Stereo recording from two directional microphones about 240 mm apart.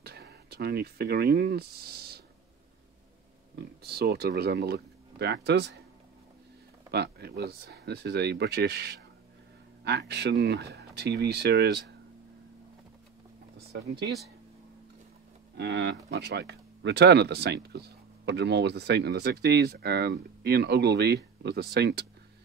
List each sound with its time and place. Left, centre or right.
0.0 s speech: right
3.8 s speech: right
6.9 s speech: right
13.6 s speech: right
15.5 s speech: right